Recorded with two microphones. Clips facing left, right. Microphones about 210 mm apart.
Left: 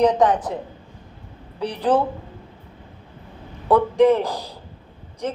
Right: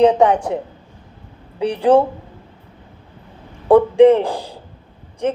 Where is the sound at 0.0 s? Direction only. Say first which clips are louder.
Right 4 dB; 25° right (ahead or behind).